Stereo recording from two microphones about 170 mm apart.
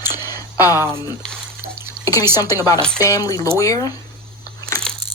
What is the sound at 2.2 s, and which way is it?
Speech, 15° right (ahead or behind).